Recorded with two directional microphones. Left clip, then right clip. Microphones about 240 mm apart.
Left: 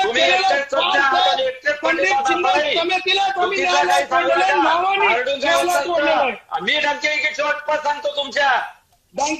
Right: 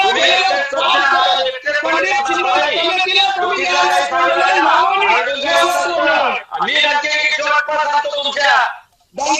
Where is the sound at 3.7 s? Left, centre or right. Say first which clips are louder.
Right 2 dB; centre.